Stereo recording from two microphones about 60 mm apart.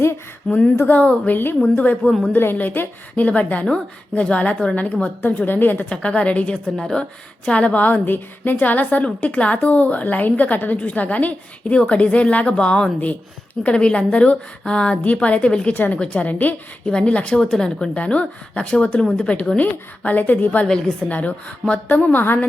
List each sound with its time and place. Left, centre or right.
0.4 s speech: centre
1.3 s a woman's voice: left
1.6 s speech: left
2.0 s a woman's voice: centre
2.3 s a woman's voice: left
5.9 s speech: centre
6.7 s speech: centre
15.7 s a woman's voice: left
16.8 s speech: centre
20.7 s speech: centre
21.1 s speech: left